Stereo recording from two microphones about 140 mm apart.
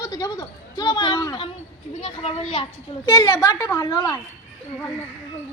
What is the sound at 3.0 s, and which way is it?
A woman's voice, 25° left (ahead or behind).